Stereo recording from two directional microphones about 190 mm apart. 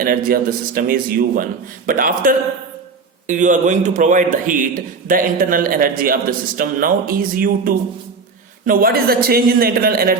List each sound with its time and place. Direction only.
0.0 s a man's voice: 50° right (ahead or behind)